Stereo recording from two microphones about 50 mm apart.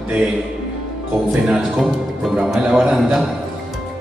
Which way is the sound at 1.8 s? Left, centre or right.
Centre.